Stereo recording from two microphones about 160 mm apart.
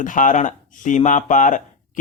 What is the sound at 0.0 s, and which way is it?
Speech, 55° left (ahead or behind).